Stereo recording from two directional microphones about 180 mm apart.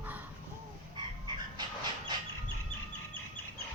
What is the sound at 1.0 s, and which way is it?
Chicken, 25° right (ahead or behind).